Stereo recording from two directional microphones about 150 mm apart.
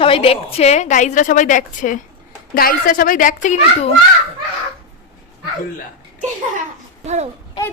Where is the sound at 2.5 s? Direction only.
75° left (ahead or behind); by 3.9 s 55° left (ahead or behind).